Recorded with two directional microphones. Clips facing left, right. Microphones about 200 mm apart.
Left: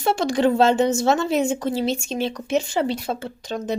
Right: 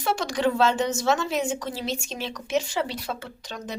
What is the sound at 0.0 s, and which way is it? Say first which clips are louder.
Speech: left 5 dB; 25° left (ahead or behind).